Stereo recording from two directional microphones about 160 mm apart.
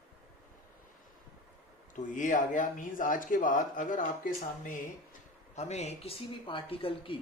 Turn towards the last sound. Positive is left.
turn(degrees=35)  # may be behind; listen again after turning